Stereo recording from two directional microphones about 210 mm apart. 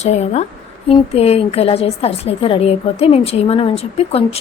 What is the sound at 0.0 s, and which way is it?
A woman's voice, 30° left (ahead or behind).